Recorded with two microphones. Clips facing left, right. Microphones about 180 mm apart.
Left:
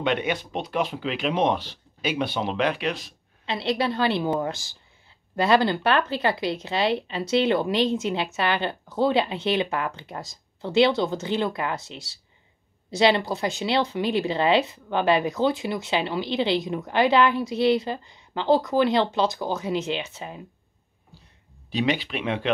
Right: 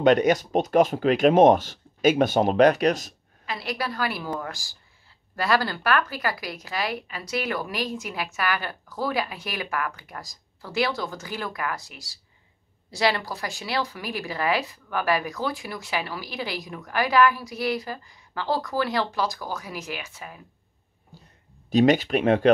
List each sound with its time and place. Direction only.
0.0 s speech: 40° right (ahead or behind)
3.4 s speech: 25° left (ahead or behind)
21.6 s speech: 45° right (ahead or behind)